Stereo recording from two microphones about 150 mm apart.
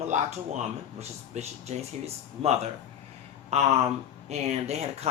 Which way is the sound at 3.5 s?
45° right (ahead or behind).